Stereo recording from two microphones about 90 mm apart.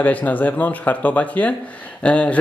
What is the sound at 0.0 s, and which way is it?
Speech, 20° left (ahead or behind).